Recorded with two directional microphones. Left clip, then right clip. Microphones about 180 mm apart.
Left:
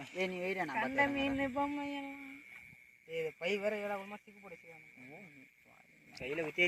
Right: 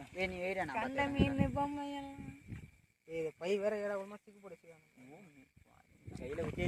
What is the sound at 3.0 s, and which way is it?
Speech, 40° right (ahead or behind).